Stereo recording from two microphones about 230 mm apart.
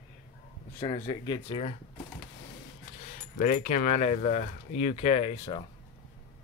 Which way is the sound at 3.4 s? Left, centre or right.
Left.